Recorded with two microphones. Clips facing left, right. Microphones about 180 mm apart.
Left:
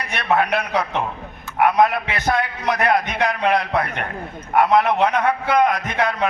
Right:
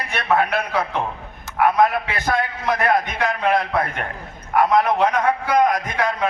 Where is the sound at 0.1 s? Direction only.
20° left (ahead or behind).